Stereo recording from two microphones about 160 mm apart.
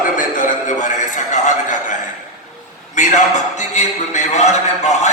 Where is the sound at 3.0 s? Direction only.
50° left (ahead or behind).